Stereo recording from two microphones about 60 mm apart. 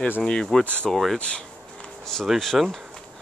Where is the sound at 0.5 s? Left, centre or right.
Centre.